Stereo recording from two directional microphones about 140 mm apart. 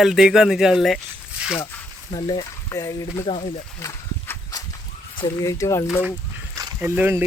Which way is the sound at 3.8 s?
20° left (ahead or behind).